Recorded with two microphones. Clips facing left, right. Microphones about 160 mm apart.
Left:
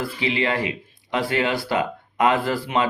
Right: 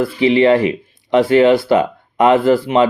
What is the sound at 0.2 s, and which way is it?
Speech, 30° right (ahead or behind).